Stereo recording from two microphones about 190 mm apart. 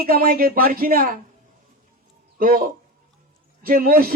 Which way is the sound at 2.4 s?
50° right (ahead or behind).